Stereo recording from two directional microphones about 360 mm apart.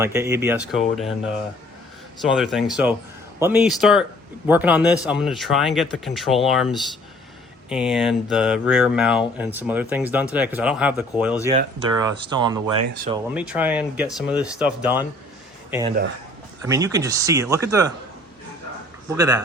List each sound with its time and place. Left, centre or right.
0.0 s speech: centre
16.6 s speech: centre
19.1 s speech: centre